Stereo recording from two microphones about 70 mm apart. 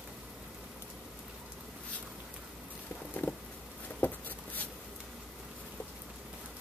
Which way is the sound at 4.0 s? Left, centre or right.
Left.